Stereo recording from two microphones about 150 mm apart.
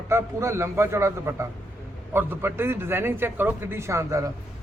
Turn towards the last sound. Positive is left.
turn(degrees=-20)  # may be behind; listen again after turning